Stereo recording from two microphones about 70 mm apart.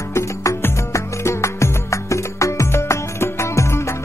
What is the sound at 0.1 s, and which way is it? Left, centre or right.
Music, left.